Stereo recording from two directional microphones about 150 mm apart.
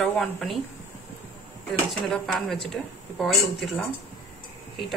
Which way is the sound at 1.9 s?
Centre (ahead or behind).